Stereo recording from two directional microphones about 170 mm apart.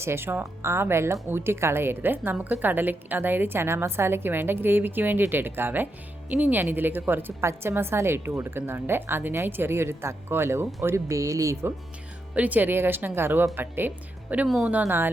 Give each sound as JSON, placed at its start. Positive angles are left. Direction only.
{"t": 0.0, "sound": "speech", "side_deg": -15}